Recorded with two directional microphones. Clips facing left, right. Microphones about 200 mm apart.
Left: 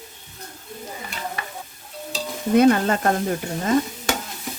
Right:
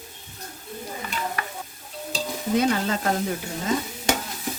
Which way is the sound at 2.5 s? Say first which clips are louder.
Left 7 dB; 55° left (ahead or behind).